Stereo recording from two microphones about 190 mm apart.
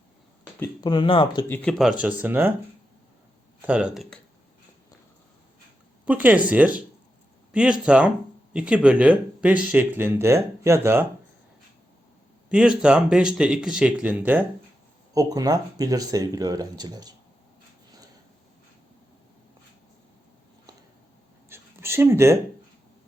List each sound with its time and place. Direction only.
0.6 s speech: 20° left (ahead or behind)
1.5 s speech: 5° left (ahead or behind); by 2.5 s 10° right (ahead or behind)
3.7 s speech: 5° right (ahead or behind)
6.1 s speech: 10° right (ahead or behind)
12.5 s speech: 5° right (ahead or behind); by 17.2 s 20° right (ahead or behind)
21.5 s a sound: 10° right (ahead or behind)